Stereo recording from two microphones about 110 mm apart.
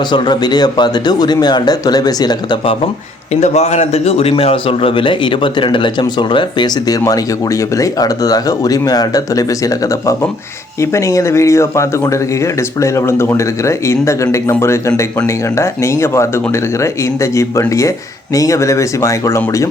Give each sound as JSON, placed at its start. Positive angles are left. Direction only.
{"t": 0.1, "sound": "speech", "side_deg": 40}
{"t": 3.4, "sound": "a man's voice", "side_deg": 85}